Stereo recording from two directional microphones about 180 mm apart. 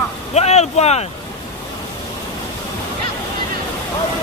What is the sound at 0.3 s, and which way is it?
Vehicle, 40° left (ahead or behind).